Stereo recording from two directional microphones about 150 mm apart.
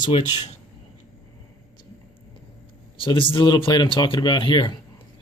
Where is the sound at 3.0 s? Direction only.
35° left (ahead or behind).